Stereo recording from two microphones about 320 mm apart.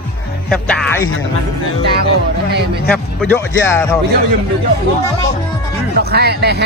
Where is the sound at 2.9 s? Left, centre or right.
Centre.